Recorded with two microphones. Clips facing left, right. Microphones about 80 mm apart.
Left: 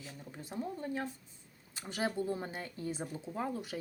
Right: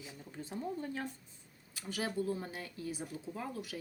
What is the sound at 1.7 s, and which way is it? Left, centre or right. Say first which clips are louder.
Speech: left 2 dB; left.